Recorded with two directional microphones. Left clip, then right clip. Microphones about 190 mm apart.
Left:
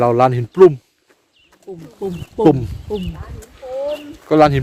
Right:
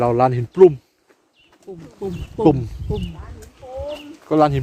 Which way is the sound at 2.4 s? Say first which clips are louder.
Left 3 dB; 20° left (ahead or behind).